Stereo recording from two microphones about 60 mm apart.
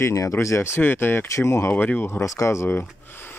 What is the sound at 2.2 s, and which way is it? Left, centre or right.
Speech, left.